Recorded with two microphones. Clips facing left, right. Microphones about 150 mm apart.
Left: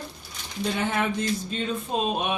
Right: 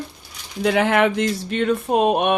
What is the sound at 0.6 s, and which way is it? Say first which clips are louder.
Speech: right 9 dB; 90° right.